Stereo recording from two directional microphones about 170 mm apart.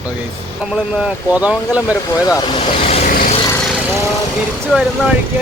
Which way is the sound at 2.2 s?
25° left (ahead or behind).